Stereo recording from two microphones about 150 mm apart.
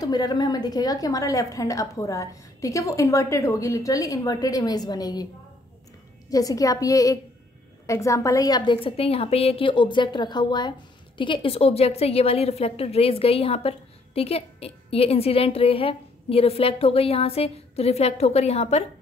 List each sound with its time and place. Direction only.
0.0 s a woman's voice: 25° left (ahead or behind)
6.3 s a woman's voice: 25° left (ahead or behind); by 18.9 s 45° left (ahead or behind)